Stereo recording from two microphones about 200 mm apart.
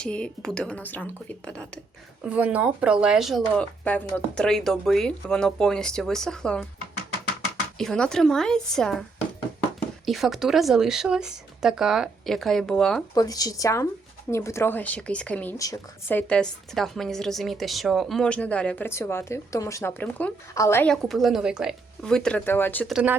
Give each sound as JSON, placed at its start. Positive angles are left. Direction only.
{"t": 0.0, "sound": "speech", "side_deg": 5}
{"t": 2.2, "sound": "speech", "side_deg": -5}
{"t": 7.8, "sound": "speech", "side_deg": 5}
{"t": 10.1, "sound": "speech", "side_deg": 0}
{"t": 13.1, "sound": "speech", "side_deg": 20}
{"t": 22.9, "sound": "speech", "side_deg": -5}